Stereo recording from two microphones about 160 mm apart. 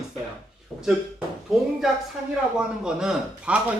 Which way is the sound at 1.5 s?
Centre (ahead or behind).